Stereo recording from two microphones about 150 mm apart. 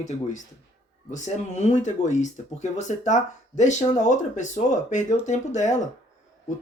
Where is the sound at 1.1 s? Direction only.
50° left (ahead or behind).